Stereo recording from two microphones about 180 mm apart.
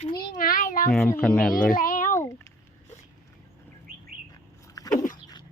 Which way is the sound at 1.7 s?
50° left (ahead or behind).